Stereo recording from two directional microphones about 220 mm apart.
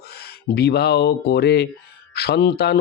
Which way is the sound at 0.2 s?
45° left (ahead or behind).